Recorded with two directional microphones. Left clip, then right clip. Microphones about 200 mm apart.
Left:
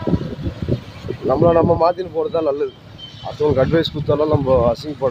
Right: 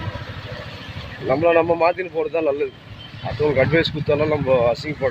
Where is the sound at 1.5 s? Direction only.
30° left (ahead or behind).